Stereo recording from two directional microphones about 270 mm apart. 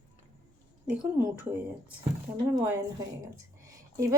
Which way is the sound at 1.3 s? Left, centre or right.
Centre.